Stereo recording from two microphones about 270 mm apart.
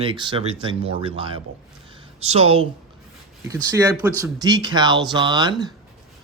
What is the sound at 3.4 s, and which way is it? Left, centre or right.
Speech, centre.